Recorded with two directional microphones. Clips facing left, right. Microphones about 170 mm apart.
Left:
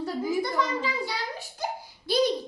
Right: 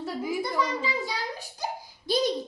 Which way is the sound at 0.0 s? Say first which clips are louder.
Left 2 dB; 5° right (ahead or behind).